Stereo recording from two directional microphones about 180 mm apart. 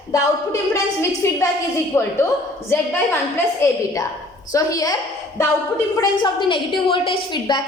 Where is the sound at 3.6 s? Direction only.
15° left (ahead or behind).